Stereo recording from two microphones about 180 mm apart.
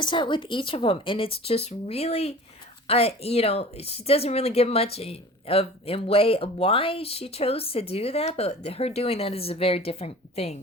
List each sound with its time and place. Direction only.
0.0 s speech: 25° left (ahead or behind)